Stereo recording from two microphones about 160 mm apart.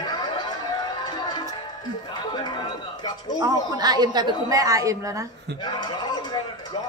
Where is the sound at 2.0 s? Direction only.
30° left (ahead or behind).